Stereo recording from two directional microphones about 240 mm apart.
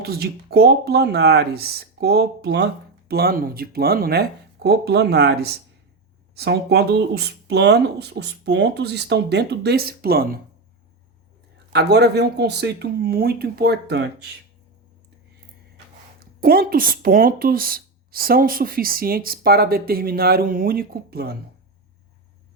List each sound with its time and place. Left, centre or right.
0.0 s speech: right
11.7 s speech: right
16.2 s speech: right